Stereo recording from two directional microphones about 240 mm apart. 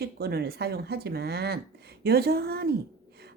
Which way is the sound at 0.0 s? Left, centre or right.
Right.